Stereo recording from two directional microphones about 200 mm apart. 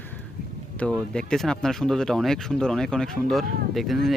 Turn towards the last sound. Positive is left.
turn(degrees=0)  # may be behind; listen again after turning